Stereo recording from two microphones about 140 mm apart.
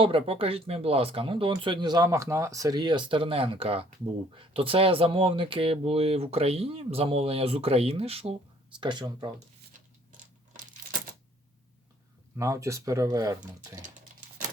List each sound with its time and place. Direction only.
0.0 s speech: 40° right (ahead or behind)
8.8 s speech: 30° right (ahead or behind)
12.4 s speech: 20° right (ahead or behind)